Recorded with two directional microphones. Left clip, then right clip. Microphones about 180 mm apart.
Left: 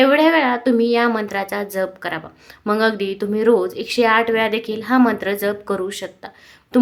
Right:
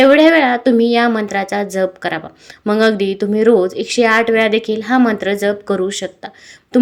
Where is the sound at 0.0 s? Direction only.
20° right (ahead or behind).